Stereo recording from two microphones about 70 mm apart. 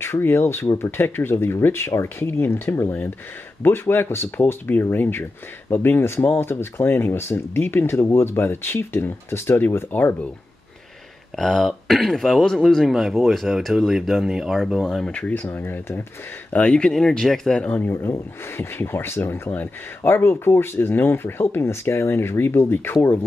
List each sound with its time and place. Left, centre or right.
0.0 s speech: left
11.3 s speech: centre
15.0 s speech: centre
15.4 s speech: left
16.5 s speech: centre
18.6 s speech: left